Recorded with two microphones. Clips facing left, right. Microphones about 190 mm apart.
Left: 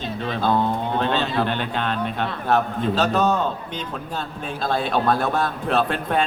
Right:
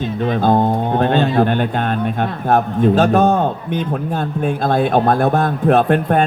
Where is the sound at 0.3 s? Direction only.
50° right (ahead or behind).